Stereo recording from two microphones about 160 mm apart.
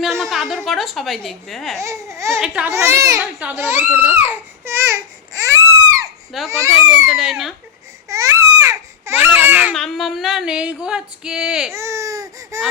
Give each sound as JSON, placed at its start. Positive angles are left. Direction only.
{"t": 0.0, "sound": "a woman's voice", "side_deg": 0}
{"t": 1.8, "sound": "baby cry", "side_deg": -20}
{"t": 2.4, "sound": "speech", "side_deg": -5}
{"t": 2.7, "sound": "baby cry", "side_deg": -20}
{"t": 3.3, "sound": "speech", "side_deg": -15}
{"t": 4.3, "sound": "baby cry", "side_deg": -15}
{"t": 6.3, "sound": "female singing", "side_deg": 0}
{"t": 8.0, "sound": "baby cry", "side_deg": -20}
{"t": 9.7, "sound": "female singing", "side_deg": 0}
{"t": 11.7, "sound": "baby cry", "side_deg": -15}